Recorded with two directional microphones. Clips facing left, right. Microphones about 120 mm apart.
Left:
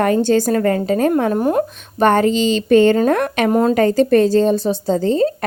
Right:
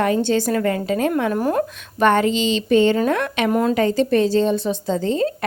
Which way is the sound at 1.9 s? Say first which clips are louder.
Left 3 dB; 40° left (ahead or behind).